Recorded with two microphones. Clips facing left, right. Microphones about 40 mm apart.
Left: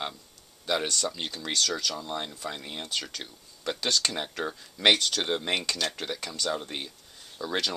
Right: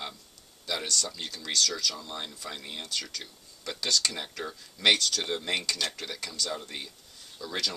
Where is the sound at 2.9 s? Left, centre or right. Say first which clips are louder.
Left 3 dB; left.